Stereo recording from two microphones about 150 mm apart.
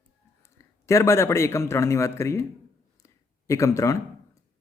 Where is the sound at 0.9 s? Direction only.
20° left (ahead or behind).